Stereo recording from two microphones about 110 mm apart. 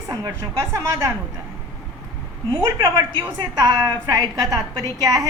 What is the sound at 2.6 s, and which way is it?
A woman's voice, 30° right (ahead or behind).